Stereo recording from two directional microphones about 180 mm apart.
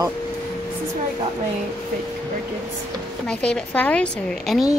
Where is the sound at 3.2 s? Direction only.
5° left (ahead or behind).